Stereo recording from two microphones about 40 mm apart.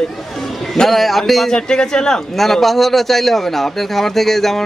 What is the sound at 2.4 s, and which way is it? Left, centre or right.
A man's voice, centre.